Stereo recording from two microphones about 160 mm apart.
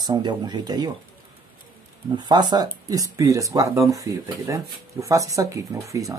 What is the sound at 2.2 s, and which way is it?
Speech, 25° right (ahead or behind).